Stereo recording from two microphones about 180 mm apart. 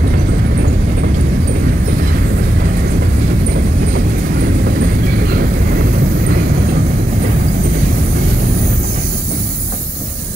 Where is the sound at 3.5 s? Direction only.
60° right (ahead or behind).